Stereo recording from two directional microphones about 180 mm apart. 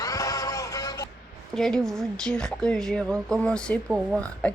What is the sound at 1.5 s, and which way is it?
A woman's voice, centre (ahead or behind).